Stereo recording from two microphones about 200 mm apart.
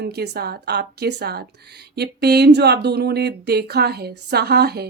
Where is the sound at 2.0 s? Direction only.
55° right (ahead or behind).